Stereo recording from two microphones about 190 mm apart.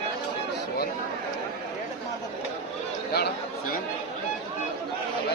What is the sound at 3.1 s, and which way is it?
Chatter, 60° left (ahead or behind).